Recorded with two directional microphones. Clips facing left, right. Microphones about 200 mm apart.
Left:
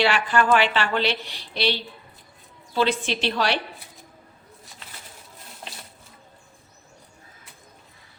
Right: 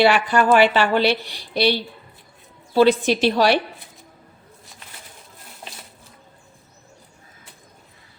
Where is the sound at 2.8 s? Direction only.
40° right (ahead or behind).